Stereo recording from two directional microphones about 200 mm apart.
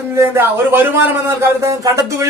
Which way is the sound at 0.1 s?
10° right (ahead or behind).